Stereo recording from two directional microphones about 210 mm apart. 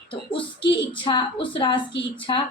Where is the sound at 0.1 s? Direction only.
25° left (ahead or behind).